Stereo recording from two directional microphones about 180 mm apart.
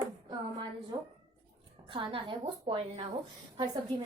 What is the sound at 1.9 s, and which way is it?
A woman's voice, 30° right (ahead or behind).